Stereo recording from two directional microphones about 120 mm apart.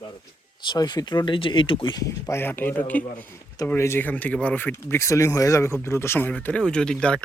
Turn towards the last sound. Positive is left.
turn(degrees=5)  # may be behind; listen again after turning